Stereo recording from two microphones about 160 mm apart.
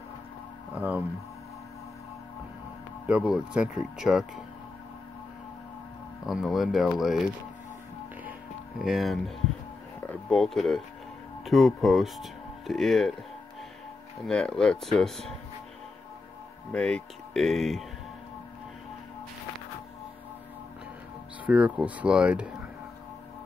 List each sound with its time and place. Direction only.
0.7 s speech: 10° right (ahead or behind)
3.1 s speech: 5° right (ahead or behind)
6.2 s speech: centre (ahead or behind)
8.2 s music: 5° right (ahead or behind)
10.0 s speech: 5° left (ahead or behind)
14.2 s speech: 5° left (ahead or behind)
16.7 s speech: 5° left (ahead or behind)
21.5 s speech: 10° right (ahead or behind)